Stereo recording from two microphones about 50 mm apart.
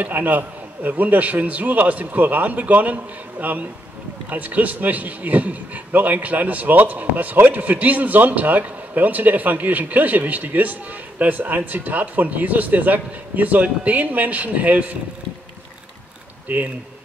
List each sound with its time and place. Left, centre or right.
0.0 s a man's voice: right
16.4 s speech: right